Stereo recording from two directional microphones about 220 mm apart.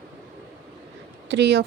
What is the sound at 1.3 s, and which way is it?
Speech, 50° right (ahead or behind).